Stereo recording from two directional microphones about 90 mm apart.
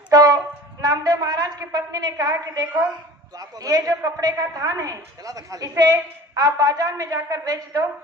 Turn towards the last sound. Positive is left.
turn(degrees=-40)  # may be behind; listen again after turning